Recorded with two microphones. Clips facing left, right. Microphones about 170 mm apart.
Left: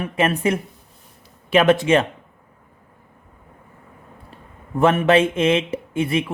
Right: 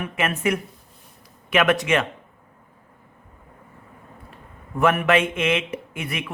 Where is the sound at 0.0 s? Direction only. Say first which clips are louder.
Left 4 dB; 30° left (ahead or behind).